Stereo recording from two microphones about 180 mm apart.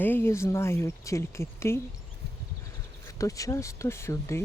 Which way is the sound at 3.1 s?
15° left (ahead or behind).